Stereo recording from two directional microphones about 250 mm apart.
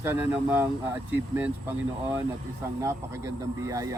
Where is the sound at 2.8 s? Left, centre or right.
Centre.